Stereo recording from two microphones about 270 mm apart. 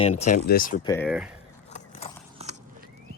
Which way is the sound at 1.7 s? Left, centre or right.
Left.